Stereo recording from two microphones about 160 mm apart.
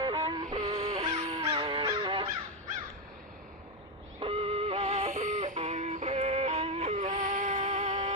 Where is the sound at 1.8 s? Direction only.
30° right (ahead or behind).